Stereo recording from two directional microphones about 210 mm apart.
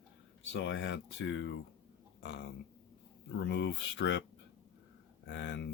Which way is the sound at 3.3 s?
55° left (ahead or behind).